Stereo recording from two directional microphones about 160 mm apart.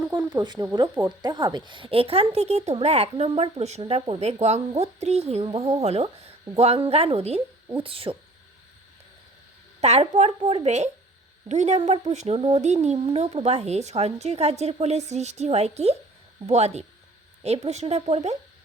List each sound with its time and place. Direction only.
0.3 s a woman's voice: 25° right (ahead or behind)
9.8 s a woman's voice: 40° right (ahead or behind)